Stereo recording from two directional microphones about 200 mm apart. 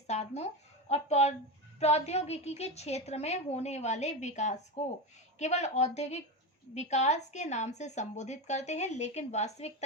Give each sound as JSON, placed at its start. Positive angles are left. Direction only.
{"t": 0.1, "sound": "a woman's voice", "side_deg": 35}